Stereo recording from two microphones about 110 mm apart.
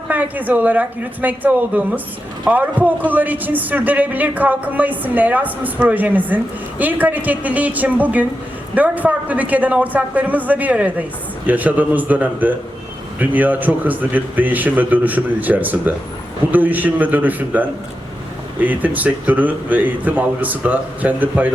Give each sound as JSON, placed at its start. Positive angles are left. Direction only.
{"t": 0.1, "sound": "speech", "side_deg": -15}